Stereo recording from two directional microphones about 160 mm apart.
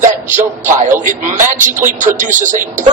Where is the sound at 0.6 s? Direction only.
55° right (ahead or behind).